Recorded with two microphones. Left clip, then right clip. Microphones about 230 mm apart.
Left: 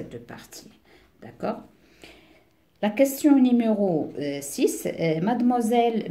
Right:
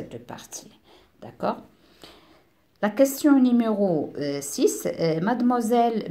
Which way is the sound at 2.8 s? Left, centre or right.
Centre.